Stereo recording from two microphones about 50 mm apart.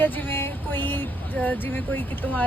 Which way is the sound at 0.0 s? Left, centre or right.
Left.